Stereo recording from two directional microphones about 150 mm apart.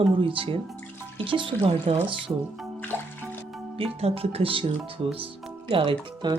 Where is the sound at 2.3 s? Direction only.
20° right (ahead or behind).